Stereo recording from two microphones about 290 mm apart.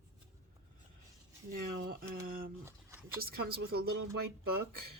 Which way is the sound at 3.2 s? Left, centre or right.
Right.